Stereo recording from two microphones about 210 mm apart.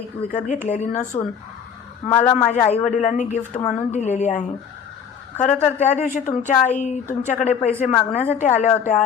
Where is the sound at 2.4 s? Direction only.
30° left (ahead or behind).